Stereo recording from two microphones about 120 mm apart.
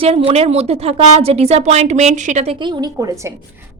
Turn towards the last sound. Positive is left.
turn(degrees=-25)  # may be behind; listen again after turning